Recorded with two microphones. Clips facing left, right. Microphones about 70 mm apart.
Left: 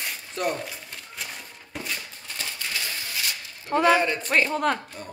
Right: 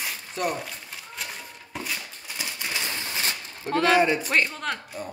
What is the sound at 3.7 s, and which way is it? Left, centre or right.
Speech, centre.